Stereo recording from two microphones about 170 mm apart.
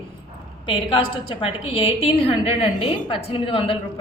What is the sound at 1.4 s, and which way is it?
A woman's voice, 30° left (ahead or behind).